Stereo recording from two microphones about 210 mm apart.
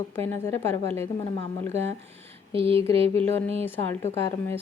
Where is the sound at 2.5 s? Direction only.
25° right (ahead or behind).